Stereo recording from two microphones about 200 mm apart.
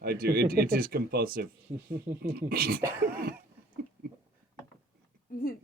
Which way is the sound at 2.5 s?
50° right (ahead or behind).